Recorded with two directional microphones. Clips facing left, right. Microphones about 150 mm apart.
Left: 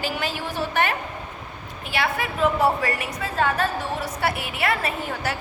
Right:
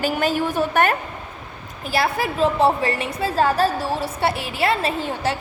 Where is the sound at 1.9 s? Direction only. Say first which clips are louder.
Right 4 dB; 35° right (ahead or behind).